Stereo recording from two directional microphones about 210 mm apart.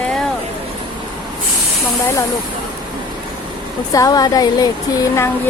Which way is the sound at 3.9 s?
15° left (ahead or behind).